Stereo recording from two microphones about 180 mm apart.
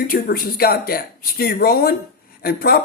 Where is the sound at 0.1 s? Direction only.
55° left (ahead or behind).